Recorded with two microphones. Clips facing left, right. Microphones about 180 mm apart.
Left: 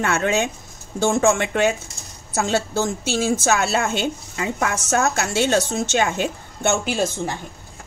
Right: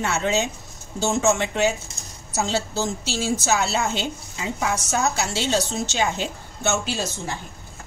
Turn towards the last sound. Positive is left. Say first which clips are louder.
# left 6 dB
turn(degrees=55)  # may be behind; listen again after turning